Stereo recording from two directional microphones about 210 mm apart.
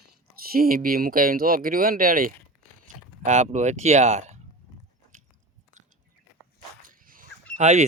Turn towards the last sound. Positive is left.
turn(degrees=-35)  # may be behind; listen again after turning